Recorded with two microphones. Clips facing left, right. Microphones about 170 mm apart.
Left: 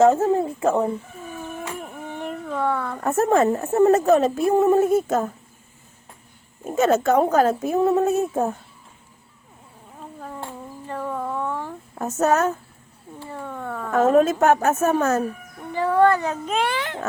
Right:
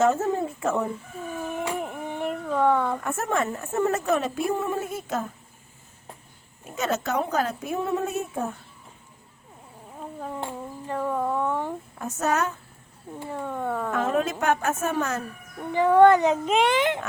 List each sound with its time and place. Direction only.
0.0 s a woman's voice: 30° left (ahead or behind)
1.6 s a sound: 15° right (ahead or behind)
3.0 s a woman's voice: 35° left (ahead or behind)
6.7 s a woman's voice: 50° left (ahead or behind)
10.8 s a sound: 5° right (ahead or behind)
11.9 s a woman's voice: 45° left (ahead or behind)
13.1 s speech: 10° right (ahead or behind)
13.9 s a woman's voice: 45° left (ahead or behind)
15.7 s speech: 15° right (ahead or behind)